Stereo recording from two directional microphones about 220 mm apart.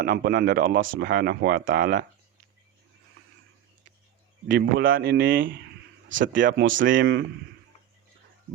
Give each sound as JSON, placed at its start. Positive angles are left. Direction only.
{"t": 0.0, "sound": "speech", "side_deg": -40}
{"t": 4.4, "sound": "speech", "side_deg": -55}
{"t": 5.4, "sound": "speech", "side_deg": -60}
{"t": 6.2, "sound": "speech", "side_deg": -40}
{"t": 6.5, "sound": "speech", "side_deg": -60}